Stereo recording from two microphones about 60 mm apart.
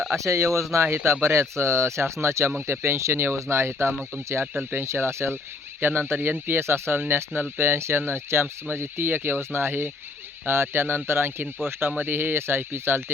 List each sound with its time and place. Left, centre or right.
0.2 s speech: right